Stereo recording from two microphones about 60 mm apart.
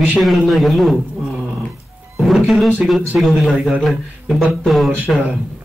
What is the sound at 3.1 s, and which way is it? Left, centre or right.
Speech, centre.